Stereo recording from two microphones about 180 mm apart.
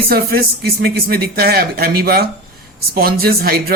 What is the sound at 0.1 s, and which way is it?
Speech, 60° right (ahead or behind).